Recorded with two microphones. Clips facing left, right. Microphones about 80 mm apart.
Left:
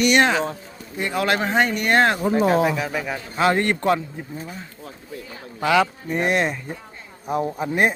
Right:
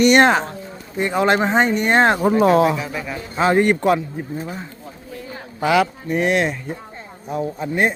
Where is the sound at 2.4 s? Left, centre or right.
Right.